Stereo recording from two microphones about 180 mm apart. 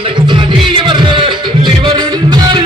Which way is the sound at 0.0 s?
25° right (ahead or behind).